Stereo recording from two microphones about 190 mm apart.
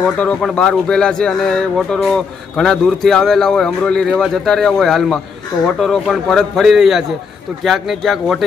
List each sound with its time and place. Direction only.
0.0 s a man's voice: 5° left (ahead or behind)